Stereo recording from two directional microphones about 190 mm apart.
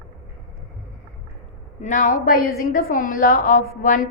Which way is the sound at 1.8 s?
40° left (ahead or behind).